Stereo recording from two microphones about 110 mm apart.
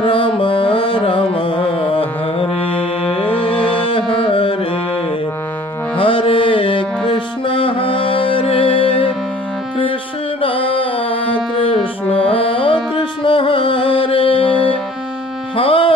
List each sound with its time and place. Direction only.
0.0 s music: 50° left (ahead or behind)
5.9 s music: 55° left (ahead or behind)
10.4 s music: 55° left (ahead or behind)
15.5 s music: 55° left (ahead or behind)